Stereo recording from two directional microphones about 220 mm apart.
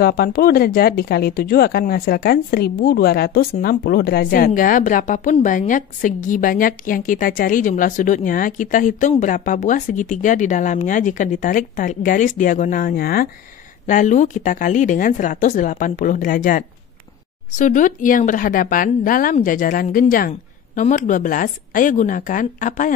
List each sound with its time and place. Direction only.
0.0 s speech: 45° left (ahead or behind)